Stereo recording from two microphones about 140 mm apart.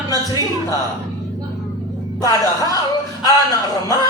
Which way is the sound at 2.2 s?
25° left (ahead or behind).